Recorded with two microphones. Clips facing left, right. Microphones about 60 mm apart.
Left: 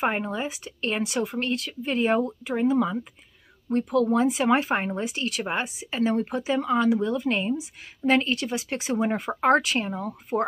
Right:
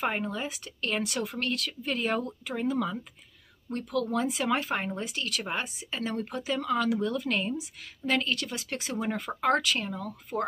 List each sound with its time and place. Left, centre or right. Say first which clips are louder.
0.0 s speech: left 4 dB; centre
1.0 s speech: left 5 dB; centre; by 10.4 s left